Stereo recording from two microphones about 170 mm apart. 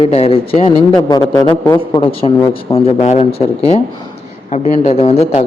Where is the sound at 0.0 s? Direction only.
35° left (ahead or behind).